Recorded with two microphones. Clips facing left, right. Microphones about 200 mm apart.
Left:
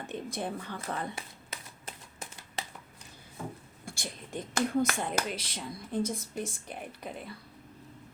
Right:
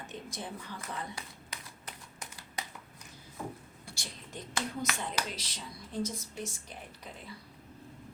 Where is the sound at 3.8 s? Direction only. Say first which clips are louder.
Left 5 dB; 50° left (ahead or behind).